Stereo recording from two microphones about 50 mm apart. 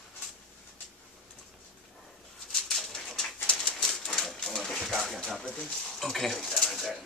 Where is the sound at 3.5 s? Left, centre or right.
Left.